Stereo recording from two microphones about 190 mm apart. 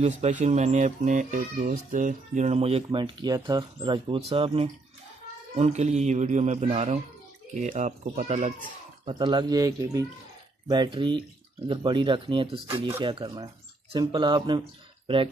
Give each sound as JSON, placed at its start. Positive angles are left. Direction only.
{"t": 0.0, "sound": "speech", "side_deg": -40}
{"t": 9.0, "sound": "speech", "side_deg": -25}